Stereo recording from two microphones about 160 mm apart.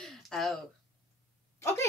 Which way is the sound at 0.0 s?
Centre (ahead or behind).